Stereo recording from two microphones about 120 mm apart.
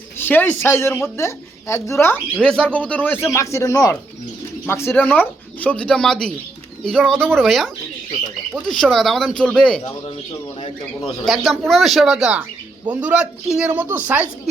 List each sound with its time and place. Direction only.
0.2 s a woman's voice: 15° left (ahead or behind)
2.4 s speech: 10° left (ahead or behind)
11.3 s speech: centre (ahead or behind)